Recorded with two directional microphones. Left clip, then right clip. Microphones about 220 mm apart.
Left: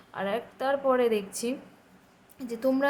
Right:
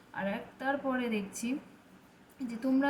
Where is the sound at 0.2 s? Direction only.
35° left (ahead or behind).